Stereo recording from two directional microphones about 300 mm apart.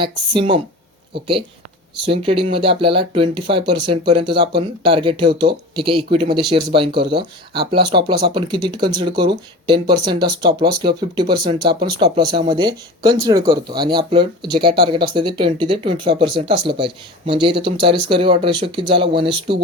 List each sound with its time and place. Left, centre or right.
0.0 s speech: centre
2.0 s speech: centre
7.2 s speech: right
7.7 s speech: centre